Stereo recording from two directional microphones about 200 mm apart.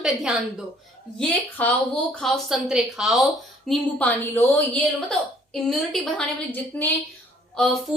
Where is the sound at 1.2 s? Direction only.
10° left (ahead or behind).